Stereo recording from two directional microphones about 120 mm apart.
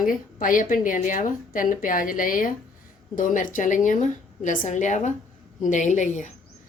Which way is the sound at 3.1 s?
90° left.